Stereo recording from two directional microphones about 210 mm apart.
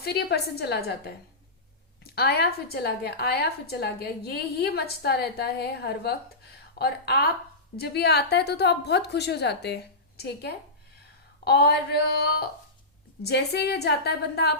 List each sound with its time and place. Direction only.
0.0 s a woman's voice: 50° left (ahead or behind)
2.1 s a woman's voice: 50° left (ahead or behind)